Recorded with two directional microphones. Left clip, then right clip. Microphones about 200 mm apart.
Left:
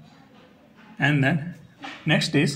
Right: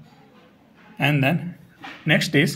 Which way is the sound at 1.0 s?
20° right (ahead or behind).